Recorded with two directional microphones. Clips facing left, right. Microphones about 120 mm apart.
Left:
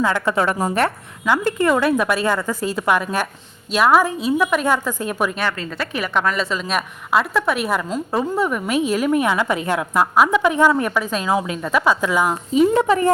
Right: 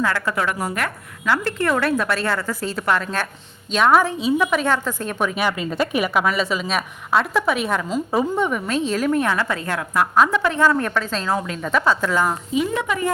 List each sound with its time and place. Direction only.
0.0 s a woman's voice: 20° left (ahead or behind)
1.2 s a woman's voice: 15° left (ahead or behind)
5.3 s a woman's voice: 10° right (ahead or behind)
8.6 s a woman's voice: 10° left (ahead or behind)
12.5 s a woman's voice: 35° left (ahead or behind)